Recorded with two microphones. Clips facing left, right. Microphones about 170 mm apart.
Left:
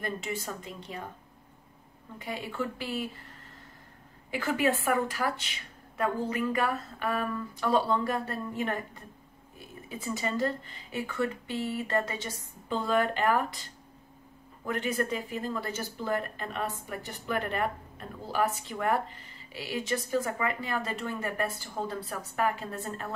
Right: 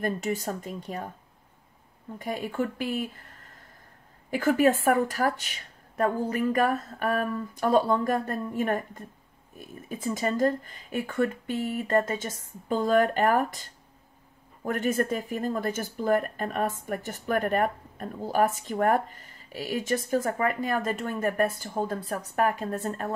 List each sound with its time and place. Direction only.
0.0 s speech: 45° right (ahead or behind)
2.1 s speech: 45° right (ahead or behind)
4.3 s speech: 45° right (ahead or behind)